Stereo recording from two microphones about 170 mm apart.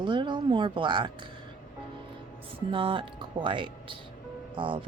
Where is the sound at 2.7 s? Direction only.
30° right (ahead or behind).